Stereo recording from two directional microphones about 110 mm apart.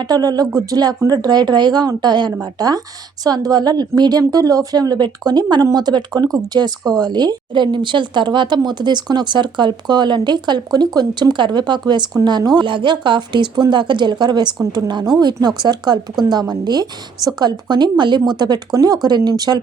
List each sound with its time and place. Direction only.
0.0 s speech: 35° right (ahead or behind)